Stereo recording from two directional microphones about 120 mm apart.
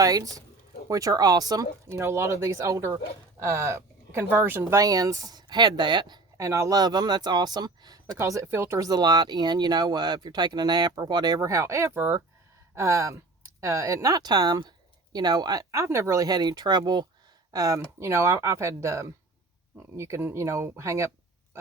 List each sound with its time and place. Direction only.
0.0 s speech: 30° right (ahead or behind)
21.5 s pig: 20° right (ahead or behind)